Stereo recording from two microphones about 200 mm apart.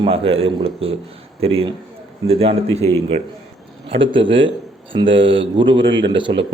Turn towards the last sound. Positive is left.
turn(degrees=-25)  # may be behind; listen again after turning